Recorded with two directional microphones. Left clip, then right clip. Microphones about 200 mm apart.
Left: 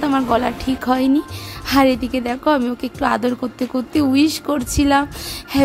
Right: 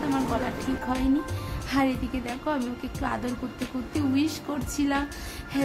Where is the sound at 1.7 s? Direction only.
50° left (ahead or behind).